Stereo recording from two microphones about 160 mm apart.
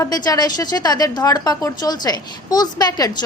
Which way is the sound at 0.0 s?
25° left (ahead or behind).